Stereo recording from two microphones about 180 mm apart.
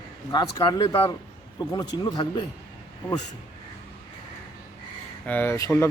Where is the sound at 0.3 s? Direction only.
25° left (ahead or behind).